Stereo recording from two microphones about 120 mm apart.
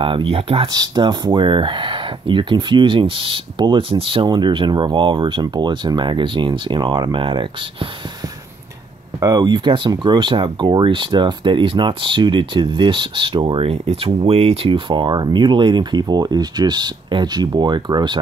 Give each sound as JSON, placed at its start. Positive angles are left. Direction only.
{"t": 0.0, "sound": "speech", "side_deg": -45}
{"t": 0.7, "sound": "speech", "side_deg": -35}
{"t": 9.2, "sound": "speech", "side_deg": -35}